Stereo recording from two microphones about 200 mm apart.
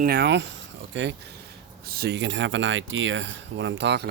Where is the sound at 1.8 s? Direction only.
50° right (ahead or behind).